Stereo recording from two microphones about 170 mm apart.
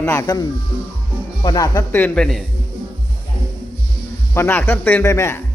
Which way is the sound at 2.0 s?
5° left (ahead or behind).